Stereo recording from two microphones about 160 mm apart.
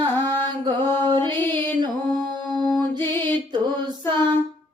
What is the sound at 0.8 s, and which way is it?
Music, 15° left (ahead or behind).